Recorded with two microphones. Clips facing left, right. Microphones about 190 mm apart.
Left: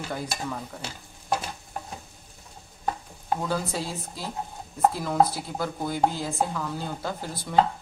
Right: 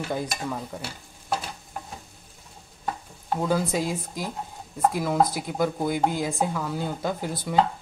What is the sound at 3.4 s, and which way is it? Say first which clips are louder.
Speech: right 9 dB; 15° right (ahead or behind).